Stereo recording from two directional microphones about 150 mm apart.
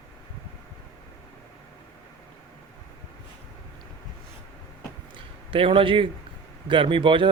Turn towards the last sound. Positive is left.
turn(degrees=-35)  # may be behind; listen again after turning